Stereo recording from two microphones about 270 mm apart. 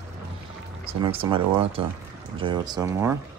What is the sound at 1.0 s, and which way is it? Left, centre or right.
Speech, centre.